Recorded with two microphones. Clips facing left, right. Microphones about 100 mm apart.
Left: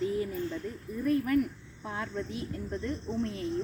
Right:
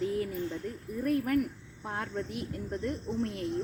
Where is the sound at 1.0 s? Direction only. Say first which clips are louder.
Left 1 dB; 70° right (ahead or behind).